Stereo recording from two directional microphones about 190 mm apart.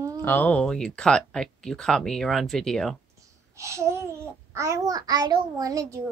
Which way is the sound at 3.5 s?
15° right (ahead or behind).